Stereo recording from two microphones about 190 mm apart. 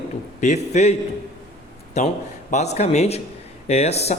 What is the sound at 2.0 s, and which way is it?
A man's voice, 35° left (ahead or behind).